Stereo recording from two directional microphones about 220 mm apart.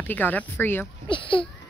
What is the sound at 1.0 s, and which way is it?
Speech, 20° left (ahead or behind).